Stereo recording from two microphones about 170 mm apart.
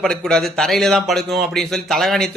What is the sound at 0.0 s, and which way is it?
A man's voice, 5° left (ahead or behind).